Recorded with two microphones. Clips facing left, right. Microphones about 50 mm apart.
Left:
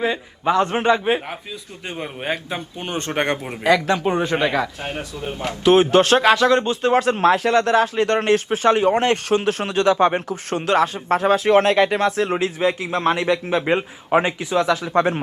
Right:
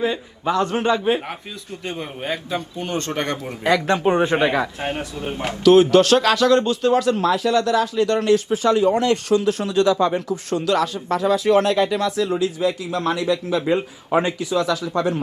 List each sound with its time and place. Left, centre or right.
0.0 s a man's voice: left
4.2 s speech: right
5.2 s speech: right
5.6 s a man's voice: left